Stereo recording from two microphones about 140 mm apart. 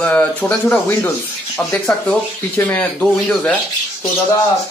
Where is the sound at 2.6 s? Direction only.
15° left (ahead or behind).